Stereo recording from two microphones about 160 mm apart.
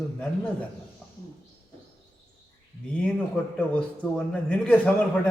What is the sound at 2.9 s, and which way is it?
A man's voice, 10° left (ahead or behind).